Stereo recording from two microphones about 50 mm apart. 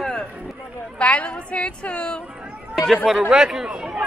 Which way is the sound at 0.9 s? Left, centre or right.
Left.